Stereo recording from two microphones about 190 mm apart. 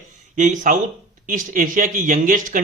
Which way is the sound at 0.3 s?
40° right (ahead or behind).